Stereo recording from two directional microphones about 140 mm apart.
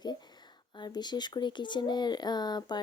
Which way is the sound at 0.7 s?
30° left (ahead or behind).